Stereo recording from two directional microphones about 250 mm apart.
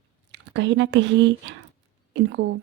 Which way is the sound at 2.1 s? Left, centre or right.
Right.